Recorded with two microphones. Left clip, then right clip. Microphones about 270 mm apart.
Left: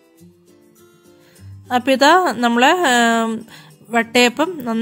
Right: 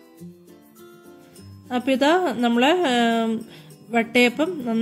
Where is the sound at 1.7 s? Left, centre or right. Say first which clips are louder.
Left 7 dB; left.